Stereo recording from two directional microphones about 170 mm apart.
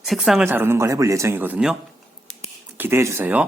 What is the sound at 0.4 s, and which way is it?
Speech, 15° right (ahead or behind).